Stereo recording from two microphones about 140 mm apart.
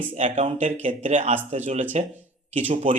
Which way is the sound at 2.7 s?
45° right (ahead or behind).